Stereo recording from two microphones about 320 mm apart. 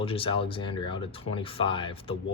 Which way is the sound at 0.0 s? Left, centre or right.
Centre.